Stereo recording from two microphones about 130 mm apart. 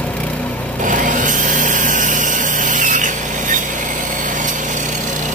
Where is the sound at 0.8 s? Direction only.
80° right.